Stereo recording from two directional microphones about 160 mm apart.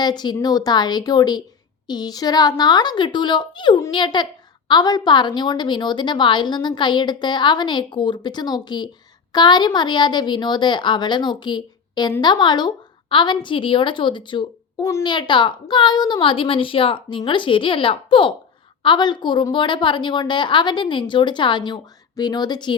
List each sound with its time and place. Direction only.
0.0 s a woman's voice: 25° left (ahead or behind)